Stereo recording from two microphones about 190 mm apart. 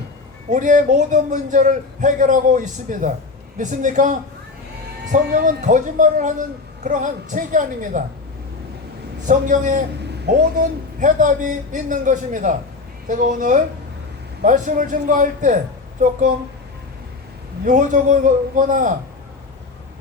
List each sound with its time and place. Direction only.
0.5 s a man's voice: 40° right (ahead or behind)
9.2 s speech: 40° right (ahead or behind)
11.0 s a man's voice: 45° right (ahead or behind)
17.7 s a man's voice: 40° right (ahead or behind)